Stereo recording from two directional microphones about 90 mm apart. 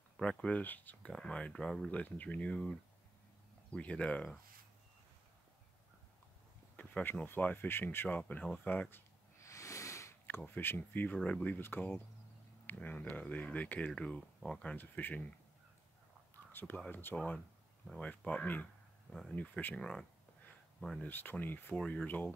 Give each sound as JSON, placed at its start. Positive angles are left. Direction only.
{"t": 0.2, "sound": "speech", "side_deg": 10}
{"t": 1.9, "sound": "speech", "side_deg": 15}
{"t": 6.8, "sound": "speech", "side_deg": 20}
{"t": 9.4, "sound": "a sound", "side_deg": 35}
{"t": 10.2, "sound": "speech", "side_deg": 20}
{"t": 14.8, "sound": "speech", "side_deg": 20}
{"t": 16.5, "sound": "speech", "side_deg": 25}
{"t": 17.8, "sound": "speech", "side_deg": 10}
{"t": 21.0, "sound": "speech", "side_deg": 20}